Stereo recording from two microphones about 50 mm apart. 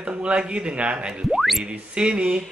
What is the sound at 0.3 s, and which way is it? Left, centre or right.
Speech, right.